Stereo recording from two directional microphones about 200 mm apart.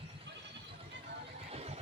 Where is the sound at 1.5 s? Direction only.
30° right (ahead or behind).